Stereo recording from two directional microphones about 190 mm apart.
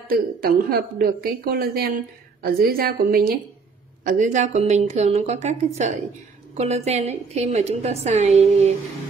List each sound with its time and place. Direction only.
0.1 s a woman's voice: 50° right (ahead or behind); by 8.7 s 35° right (ahead or behind)